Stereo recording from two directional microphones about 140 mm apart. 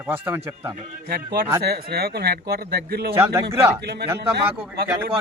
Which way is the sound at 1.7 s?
90° right.